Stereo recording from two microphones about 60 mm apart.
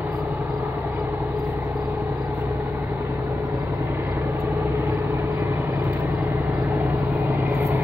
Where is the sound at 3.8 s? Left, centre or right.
Right.